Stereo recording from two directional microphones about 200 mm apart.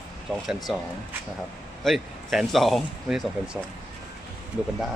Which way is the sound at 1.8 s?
Centre (ahead or behind).